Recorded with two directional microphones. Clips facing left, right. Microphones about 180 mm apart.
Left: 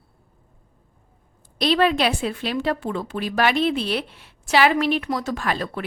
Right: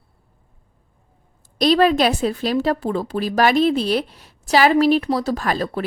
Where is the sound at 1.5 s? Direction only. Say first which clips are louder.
Right 4 dB; 40° right (ahead or behind).